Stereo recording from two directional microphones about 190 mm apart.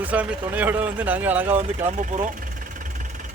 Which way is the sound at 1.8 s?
40° right (ahead or behind).